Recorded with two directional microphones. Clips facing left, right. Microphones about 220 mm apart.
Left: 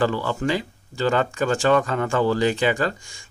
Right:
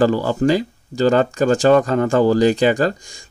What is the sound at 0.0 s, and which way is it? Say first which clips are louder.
Speech: right 7 dB; 40° right (ahead or behind).